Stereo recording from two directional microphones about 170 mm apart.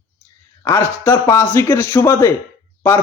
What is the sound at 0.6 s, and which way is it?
A man's voice, 15° left (ahead or behind).